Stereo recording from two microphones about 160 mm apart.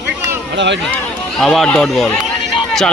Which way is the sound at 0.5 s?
90° right.